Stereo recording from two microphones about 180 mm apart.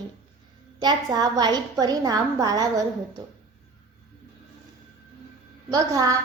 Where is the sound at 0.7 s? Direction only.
25° right (ahead or behind).